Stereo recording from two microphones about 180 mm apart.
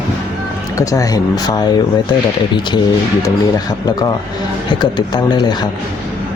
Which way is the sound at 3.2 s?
20° left (ahead or behind).